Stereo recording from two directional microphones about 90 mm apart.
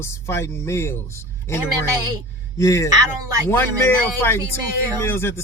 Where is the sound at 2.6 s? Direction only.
35° left (ahead or behind).